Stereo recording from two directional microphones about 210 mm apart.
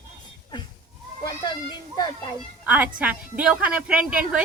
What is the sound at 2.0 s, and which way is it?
Speech, 20° left (ahead or behind).